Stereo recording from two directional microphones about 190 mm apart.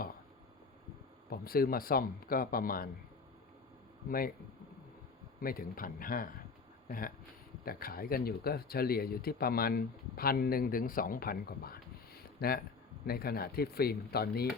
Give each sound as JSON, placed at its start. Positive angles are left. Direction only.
{"t": 1.3, "sound": "speech", "side_deg": 50}
{"t": 5.4, "sound": "speech", "side_deg": 50}